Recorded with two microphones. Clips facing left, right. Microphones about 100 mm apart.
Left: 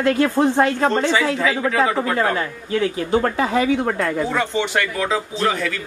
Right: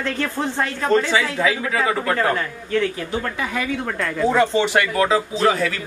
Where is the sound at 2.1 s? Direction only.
15° left (ahead or behind).